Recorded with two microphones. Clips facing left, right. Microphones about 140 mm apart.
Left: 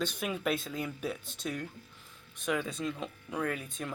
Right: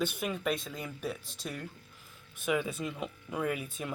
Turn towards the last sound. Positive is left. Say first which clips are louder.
# right 1 dB
turn(degrees=-5)  # may be behind; listen again after turning